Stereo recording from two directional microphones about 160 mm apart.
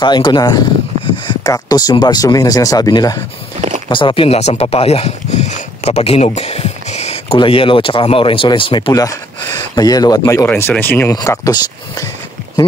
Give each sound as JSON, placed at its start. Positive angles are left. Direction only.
{"t": 0.0, "sound": "speech", "side_deg": 30}